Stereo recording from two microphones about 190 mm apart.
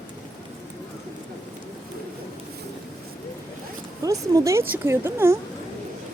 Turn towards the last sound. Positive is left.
turn(degrees=-15)  # may be behind; listen again after turning